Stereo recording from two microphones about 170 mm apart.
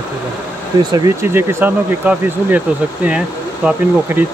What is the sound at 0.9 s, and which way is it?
Speech, 15° right (ahead or behind).